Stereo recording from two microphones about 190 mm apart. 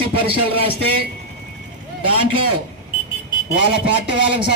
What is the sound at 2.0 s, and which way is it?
Speech, 25° right (ahead or behind).